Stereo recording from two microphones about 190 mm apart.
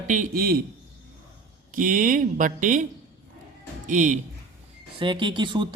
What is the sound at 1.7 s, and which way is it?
Speech, 45° right (ahead or behind).